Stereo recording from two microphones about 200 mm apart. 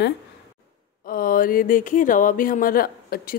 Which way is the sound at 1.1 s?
45° left (ahead or behind).